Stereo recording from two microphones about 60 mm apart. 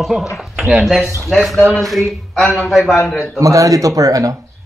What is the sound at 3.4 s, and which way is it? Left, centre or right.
Speech, right.